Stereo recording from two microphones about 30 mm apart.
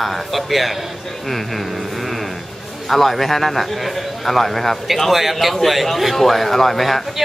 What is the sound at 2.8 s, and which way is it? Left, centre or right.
A man's voice, centre.